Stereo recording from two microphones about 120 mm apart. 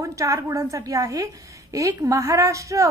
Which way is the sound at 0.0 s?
25° right (ahead or behind).